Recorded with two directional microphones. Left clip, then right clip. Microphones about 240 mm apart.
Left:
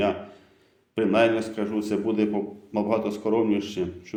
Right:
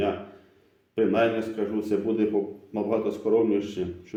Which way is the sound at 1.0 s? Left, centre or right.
Left.